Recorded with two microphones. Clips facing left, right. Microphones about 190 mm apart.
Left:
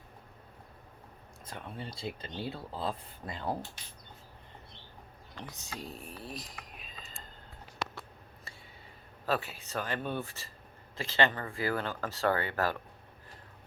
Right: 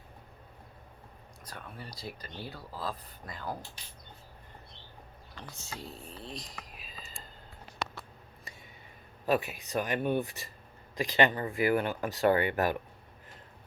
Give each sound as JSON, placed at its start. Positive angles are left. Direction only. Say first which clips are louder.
{"t": 1.5, "sound": "speech", "louder": "left 3 dB", "side_deg": 25}
{"t": 5.4, "sound": "speech", "louder": "left 1 dB", "side_deg": 15}
{"t": 6.1, "sound": "a sound", "louder": "even", "side_deg": 5}
{"t": 9.2, "sound": "speech", "louder": "right 4 dB", "side_deg": -15}